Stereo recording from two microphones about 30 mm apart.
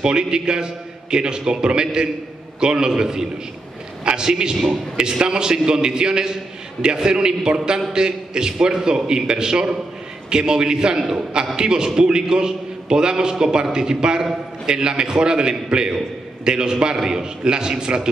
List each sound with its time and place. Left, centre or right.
0.0 s a man's voice: right